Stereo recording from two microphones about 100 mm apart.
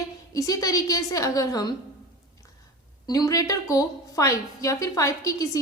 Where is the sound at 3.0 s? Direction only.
40° left (ahead or behind).